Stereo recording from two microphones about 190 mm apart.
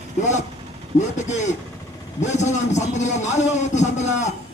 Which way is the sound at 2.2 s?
40° left (ahead or behind).